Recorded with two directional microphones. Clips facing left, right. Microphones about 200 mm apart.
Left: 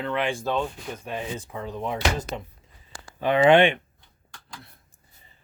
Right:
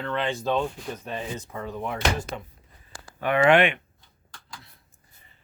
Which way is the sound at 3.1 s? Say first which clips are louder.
Left 2 dB; 25° left (ahead or behind).